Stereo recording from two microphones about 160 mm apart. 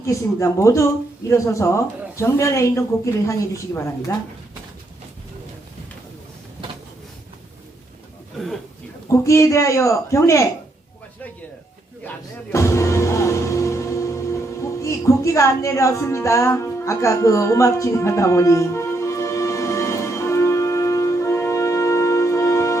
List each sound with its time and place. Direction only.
0.0 s a woman's voice: 20° left (ahead or behind)
9.1 s speech: 20° left (ahead or behind)
12.0 s music: 15° left (ahead or behind)